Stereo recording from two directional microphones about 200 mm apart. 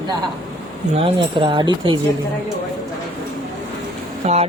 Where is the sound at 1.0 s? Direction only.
25° right (ahead or behind).